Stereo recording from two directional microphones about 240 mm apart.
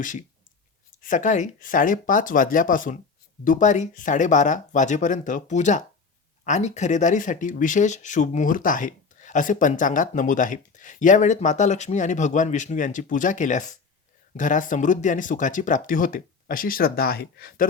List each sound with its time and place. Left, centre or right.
0.0 s speech: left